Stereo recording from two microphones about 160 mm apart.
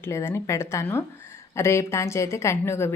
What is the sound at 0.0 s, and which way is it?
Speech, 15° left (ahead or behind).